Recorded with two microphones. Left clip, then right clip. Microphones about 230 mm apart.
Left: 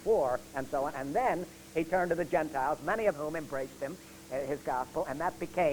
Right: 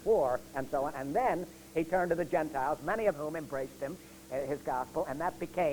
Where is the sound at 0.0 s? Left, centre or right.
Left.